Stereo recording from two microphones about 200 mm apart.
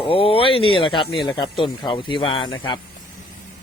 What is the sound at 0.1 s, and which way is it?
Speech, 25° left (ahead or behind).